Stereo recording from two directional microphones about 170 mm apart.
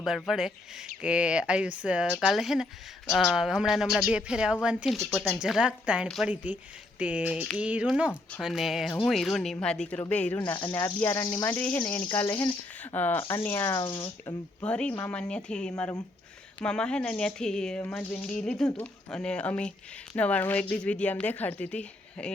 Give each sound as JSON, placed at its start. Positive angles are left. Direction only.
{"t": 0.3, "sound": "speech", "side_deg": -5}
{"t": 7.0, "sound": "a sound", "side_deg": -10}
{"t": 7.4, "sound": "speech", "side_deg": -5}
{"t": 12.0, "sound": "speech", "side_deg": 30}
{"t": 12.3, "sound": "speech", "side_deg": 15}
{"t": 13.9, "sound": "speech", "side_deg": 30}
{"t": 14.6, "sound": "speech", "side_deg": 5}